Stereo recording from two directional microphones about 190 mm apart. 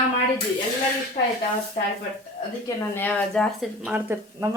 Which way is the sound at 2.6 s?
10° left (ahead or behind).